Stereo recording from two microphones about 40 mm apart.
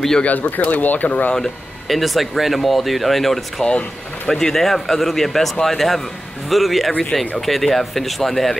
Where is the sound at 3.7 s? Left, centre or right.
Left.